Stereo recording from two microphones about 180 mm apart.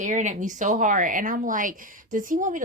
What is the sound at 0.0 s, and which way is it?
Speech, 45° right (ahead or behind).